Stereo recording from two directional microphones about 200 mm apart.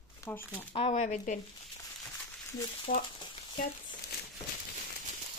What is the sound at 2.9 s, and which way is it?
Speech, 45° left (ahead or behind).